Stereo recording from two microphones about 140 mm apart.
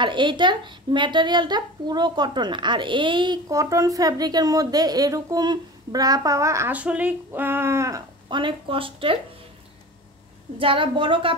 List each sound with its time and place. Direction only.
0.0 s speech: 35° right (ahead or behind)
3.4 s a woman's voice: 25° right (ahead or behind)
6.7 s speech: 10° right (ahead or behind)
8.3 s speech: 35° right (ahead or behind)
10.6 s speech: 40° right (ahead or behind)